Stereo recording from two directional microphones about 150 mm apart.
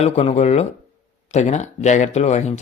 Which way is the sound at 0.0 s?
45° left (ahead or behind).